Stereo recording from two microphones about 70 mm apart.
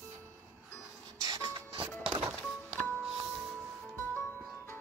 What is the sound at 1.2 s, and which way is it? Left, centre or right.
Printer, right.